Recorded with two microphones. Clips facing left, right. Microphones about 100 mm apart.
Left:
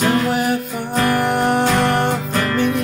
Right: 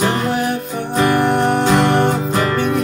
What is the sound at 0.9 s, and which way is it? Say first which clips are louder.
Music: right 2 dB; 25° right (ahead or behind).